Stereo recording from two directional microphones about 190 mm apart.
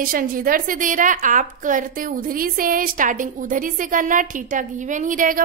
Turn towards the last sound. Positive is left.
turn(degrees=-45)  # may be behind; listen again after turning